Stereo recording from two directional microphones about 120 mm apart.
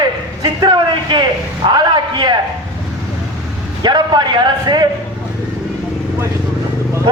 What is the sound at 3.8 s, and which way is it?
A man's voice, 40° right (ahead or behind).